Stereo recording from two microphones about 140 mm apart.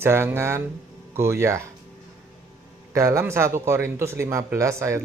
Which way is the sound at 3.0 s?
20° right (ahead or behind).